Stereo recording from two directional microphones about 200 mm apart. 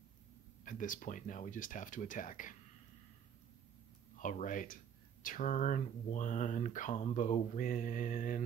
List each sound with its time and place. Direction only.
0.7 s speech: 40° left (ahead or behind)
4.2 s speech: 40° left (ahead or behind)